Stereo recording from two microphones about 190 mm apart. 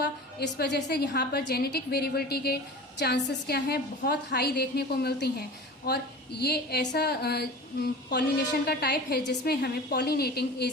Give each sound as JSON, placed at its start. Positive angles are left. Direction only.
{"t": 0.0, "sound": "a woman's voice", "side_deg": 60}